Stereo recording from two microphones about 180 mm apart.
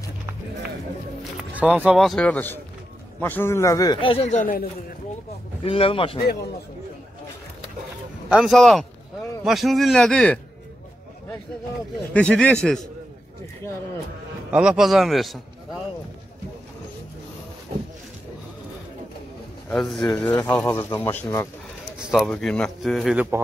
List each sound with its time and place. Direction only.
1.6 s a man's voice: 5° right (ahead or behind); by 4.6 s 50° left (ahead or behind)
5.6 s a man's voice: 30° left (ahead or behind)
8.3 s speech: centre (ahead or behind)
12.1 s speech: 5° left (ahead or behind)
14.5 s a man's voice: 5° right (ahead or behind)
19.7 s speech: centre (ahead or behind)
21.9 s speech: 5° right (ahead or behind)